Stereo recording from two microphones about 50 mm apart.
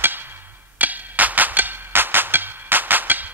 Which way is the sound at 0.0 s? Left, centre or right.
Right.